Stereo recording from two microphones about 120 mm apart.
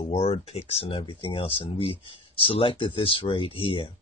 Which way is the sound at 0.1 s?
60° left (ahead or behind).